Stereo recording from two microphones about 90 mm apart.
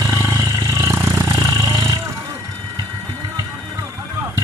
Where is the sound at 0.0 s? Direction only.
30° right (ahead or behind).